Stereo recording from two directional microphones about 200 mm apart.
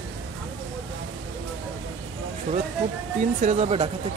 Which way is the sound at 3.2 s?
35° right (ahead or behind).